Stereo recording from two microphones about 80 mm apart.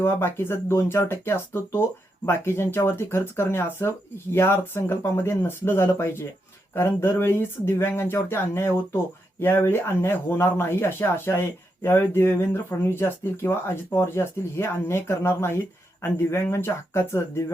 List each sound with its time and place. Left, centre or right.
0.0 s speech: left